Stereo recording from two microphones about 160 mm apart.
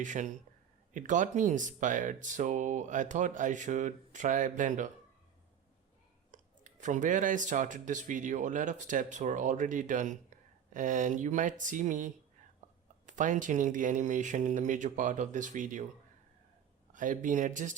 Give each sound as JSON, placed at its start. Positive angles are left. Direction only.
{"t": 0.0, "sound": "speech", "side_deg": -50}
{"t": 6.3, "sound": "speech", "side_deg": -50}
{"t": 16.9, "sound": "speech", "side_deg": -55}